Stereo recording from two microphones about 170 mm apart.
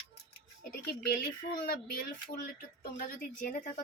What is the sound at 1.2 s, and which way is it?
Speech, 60° left (ahead or behind).